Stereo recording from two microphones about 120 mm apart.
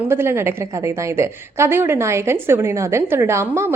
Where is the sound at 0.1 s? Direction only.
20° right (ahead or behind).